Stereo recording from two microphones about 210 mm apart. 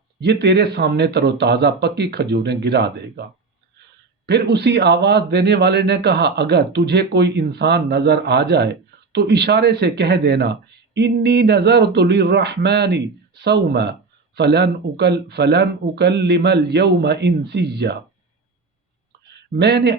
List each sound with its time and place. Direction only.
0.2 s speech: 55° right (ahead or behind)
4.3 s speech: 55° right (ahead or behind)
19.3 s speech: 55° right (ahead or behind)